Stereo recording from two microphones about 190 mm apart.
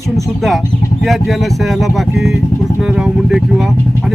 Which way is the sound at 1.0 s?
Centre (ahead or behind).